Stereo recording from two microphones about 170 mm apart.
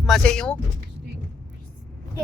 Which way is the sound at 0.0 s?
Centre (ahead or behind).